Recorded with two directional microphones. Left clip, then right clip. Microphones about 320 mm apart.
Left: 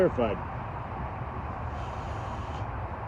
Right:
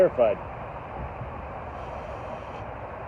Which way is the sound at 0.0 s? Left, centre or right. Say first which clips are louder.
Right 5 dB; left.